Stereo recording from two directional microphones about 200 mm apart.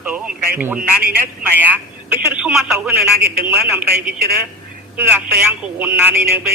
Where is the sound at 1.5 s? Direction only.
10° right (ahead or behind).